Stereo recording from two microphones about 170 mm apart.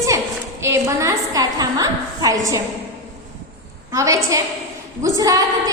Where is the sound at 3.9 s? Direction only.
20° right (ahead or behind).